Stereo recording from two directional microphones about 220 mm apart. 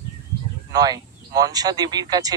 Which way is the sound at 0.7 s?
15° right (ahead or behind).